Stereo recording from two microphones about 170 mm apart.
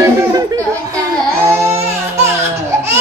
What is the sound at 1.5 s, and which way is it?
Music, 15° right (ahead or behind).